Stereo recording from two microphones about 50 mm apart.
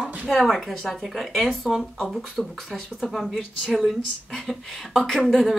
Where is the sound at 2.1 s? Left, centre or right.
Centre.